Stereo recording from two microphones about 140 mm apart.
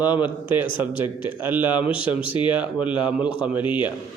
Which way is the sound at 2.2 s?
40° left (ahead or behind).